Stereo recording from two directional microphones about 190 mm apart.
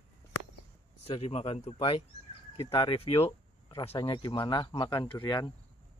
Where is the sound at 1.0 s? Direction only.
30° left (ahead or behind).